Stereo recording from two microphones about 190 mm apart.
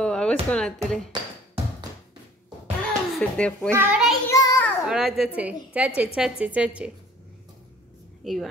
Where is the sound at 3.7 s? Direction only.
10° right (ahead or behind).